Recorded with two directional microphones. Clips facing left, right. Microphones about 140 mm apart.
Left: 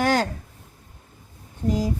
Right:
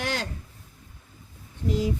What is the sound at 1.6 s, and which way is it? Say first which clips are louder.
Speech: left 3 dB; 55° left (ahead or behind).